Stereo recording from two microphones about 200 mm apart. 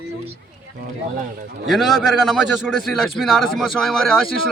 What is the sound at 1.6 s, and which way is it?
A man's voice, centre (ahead or behind).